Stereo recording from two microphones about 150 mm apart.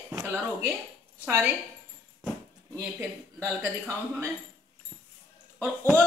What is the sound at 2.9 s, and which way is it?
Speech, 15° right (ahead or behind).